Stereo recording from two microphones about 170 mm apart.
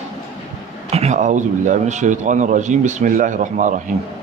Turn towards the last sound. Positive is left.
turn(degrees=-50)  # may be behind; listen again after turning